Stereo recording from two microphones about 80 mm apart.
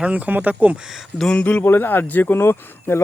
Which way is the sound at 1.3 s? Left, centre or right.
Centre.